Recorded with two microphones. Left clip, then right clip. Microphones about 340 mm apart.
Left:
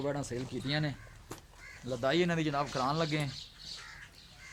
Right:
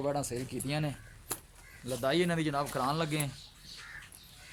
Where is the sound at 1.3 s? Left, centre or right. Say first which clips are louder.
Right 5 dB; right.